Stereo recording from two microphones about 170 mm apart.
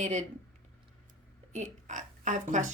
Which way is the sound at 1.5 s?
45° right (ahead or behind).